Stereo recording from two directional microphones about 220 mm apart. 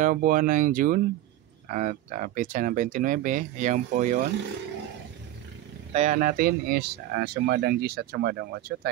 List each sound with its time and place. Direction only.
0.0 s speech: 40° right (ahead or behind)
5.9 s speech: 35° right (ahead or behind)